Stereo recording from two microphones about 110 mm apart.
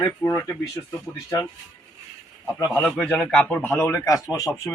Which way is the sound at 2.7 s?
5° left (ahead or behind).